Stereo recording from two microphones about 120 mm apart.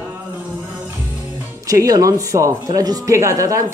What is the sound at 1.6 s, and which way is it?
Speech, 30° right (ahead or behind).